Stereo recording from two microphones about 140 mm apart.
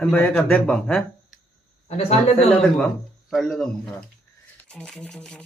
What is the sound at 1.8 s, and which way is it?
Speech, 50° left (ahead or behind).